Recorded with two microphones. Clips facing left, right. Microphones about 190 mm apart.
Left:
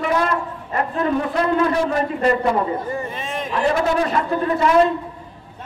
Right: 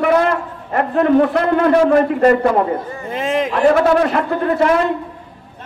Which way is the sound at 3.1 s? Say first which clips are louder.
Right 9 dB; 90° right.